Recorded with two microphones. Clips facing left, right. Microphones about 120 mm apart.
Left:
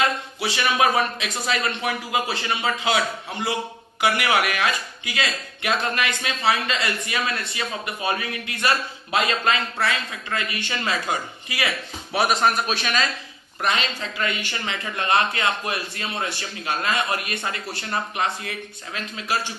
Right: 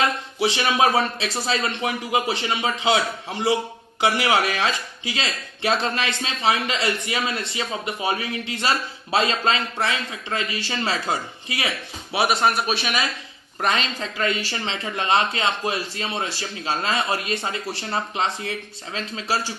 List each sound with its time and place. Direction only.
0.0 s speech: 25° right (ahead or behind)
12.1 s a man's voice: 5° right (ahead or behind)
13.6 s speech: 35° right (ahead or behind)